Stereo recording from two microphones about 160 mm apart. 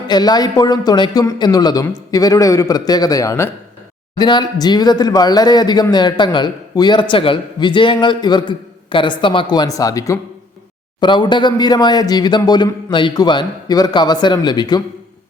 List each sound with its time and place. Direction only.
0.1 s speech: 25° left (ahead or behind)